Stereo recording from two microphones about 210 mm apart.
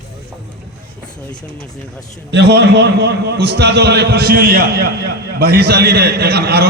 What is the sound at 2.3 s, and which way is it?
A man's voice, 55° right (ahead or behind).